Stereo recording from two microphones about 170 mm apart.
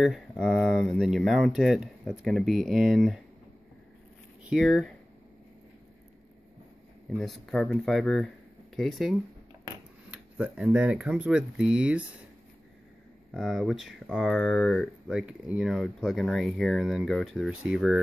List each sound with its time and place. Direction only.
0.0 s speech: centre (ahead or behind)
4.5 s speech: centre (ahead or behind)
7.1 s speech: centre (ahead or behind)
13.3 s speech: centre (ahead or behind)